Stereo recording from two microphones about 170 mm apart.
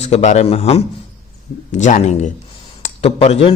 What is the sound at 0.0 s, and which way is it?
A man's voice, 40° left (ahead or behind).